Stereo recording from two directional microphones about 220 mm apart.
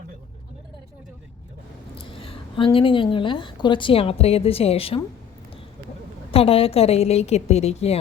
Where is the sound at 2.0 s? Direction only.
25° left (ahead or behind).